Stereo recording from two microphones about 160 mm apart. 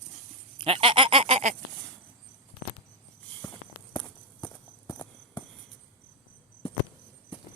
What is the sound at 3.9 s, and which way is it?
Walk, 25° left (ahead or behind).